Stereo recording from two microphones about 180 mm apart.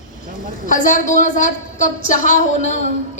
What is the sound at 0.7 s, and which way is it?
A woman's voice, 45° left (ahead or behind).